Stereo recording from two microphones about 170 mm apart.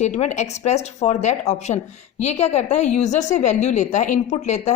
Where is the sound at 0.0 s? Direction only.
40° left (ahead or behind).